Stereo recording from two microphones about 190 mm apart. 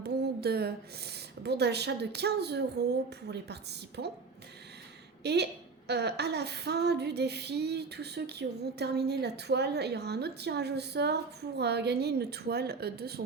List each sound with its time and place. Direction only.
0.0 s female singing: 60° right (ahead or behind)
5.2 s a woman's voice: 60° right (ahead or behind)
5.9 s female singing: 60° right (ahead or behind)